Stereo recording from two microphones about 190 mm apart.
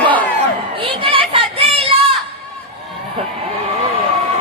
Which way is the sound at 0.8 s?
30° right (ahead or behind).